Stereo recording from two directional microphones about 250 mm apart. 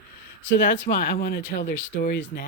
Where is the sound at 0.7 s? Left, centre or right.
Left.